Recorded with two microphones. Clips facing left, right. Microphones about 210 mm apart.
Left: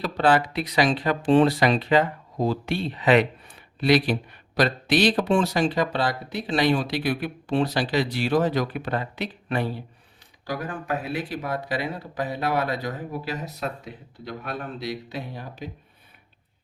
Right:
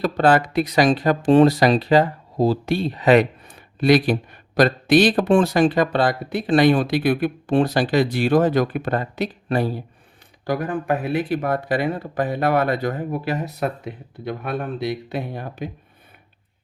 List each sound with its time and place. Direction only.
0.0 s speech: 45° right (ahead or behind)
10.4 s speech: 55° right (ahead or behind)